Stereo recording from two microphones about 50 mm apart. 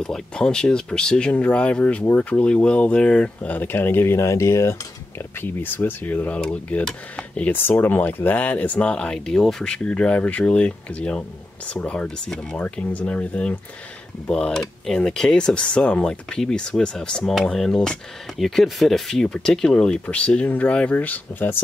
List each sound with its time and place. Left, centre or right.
0.0 s speech: centre
1.3 s speech: left
3.5 s speech: left
5.4 s speech: left
6.8 s speech: centre
7.5 s speech: left; by 9.7 s centre
9.7 s speech: left
14.3 s speech: centre; by 21.5 s left